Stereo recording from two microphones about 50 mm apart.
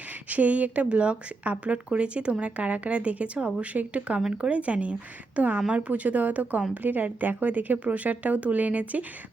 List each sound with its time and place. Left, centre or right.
0.3 s speech: right